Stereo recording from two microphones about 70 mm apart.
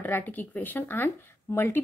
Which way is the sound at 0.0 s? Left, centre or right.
Left.